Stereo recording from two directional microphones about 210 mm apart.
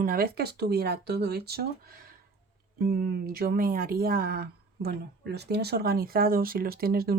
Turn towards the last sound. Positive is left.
turn(degrees=-45)  # may be behind; listen again after turning